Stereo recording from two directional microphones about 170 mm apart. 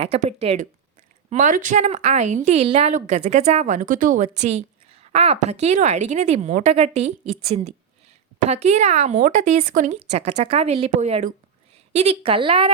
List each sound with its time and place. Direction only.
0.0 s a woman's voice: 40° right (ahead or behind)
1.3 s a woman's voice: 50° right (ahead or behind); by 12.7 s 30° right (ahead or behind)